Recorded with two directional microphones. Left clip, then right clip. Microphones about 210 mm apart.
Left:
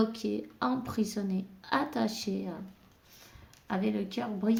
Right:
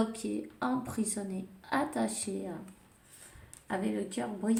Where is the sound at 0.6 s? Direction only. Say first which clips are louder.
Left 2 dB; 40° left (ahead or behind).